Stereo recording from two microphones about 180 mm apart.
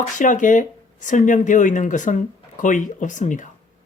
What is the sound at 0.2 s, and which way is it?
Speech, 45° left (ahead or behind).